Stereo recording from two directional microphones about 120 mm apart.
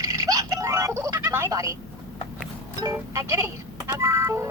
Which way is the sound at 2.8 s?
25° right (ahead or behind).